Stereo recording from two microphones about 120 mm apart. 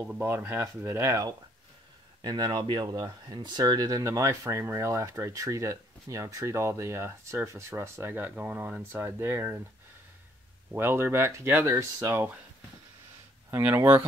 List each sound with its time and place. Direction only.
0.4 s speech: 20° right (ahead or behind)
10.7 s speech: 20° right (ahead or behind)
13.5 s speech: 20° right (ahead or behind)